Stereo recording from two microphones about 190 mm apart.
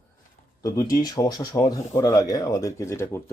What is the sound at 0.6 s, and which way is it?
Speech, 20° left (ahead or behind).